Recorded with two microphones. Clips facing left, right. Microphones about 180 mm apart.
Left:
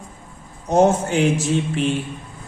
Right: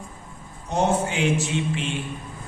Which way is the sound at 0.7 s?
45° left (ahead or behind).